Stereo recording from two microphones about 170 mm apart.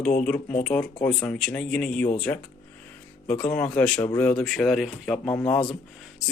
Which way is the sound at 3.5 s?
10° left (ahead or behind).